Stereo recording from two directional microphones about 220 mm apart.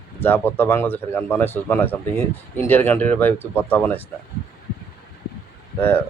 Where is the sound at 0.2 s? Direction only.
10° left (ahead or behind).